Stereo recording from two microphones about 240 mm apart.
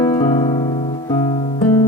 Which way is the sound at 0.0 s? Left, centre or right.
Centre.